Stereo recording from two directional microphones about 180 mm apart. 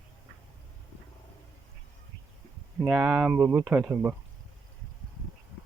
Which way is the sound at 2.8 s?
5° right (ahead or behind).